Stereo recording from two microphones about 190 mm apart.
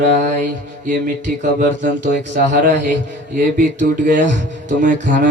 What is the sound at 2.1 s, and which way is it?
A man's voice, 45° right (ahead or behind).